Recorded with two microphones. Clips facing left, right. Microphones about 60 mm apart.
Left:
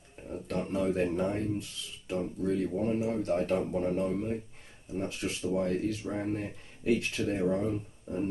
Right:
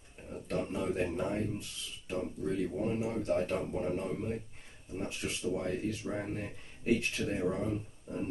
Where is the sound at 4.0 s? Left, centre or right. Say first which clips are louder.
Left 5 dB; left.